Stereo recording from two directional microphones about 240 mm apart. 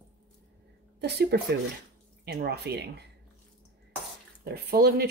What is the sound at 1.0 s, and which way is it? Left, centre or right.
Speech, right.